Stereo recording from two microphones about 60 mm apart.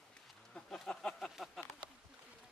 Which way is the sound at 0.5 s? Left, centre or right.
Centre.